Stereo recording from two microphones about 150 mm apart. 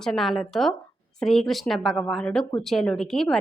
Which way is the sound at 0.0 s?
Centre (ahead or behind).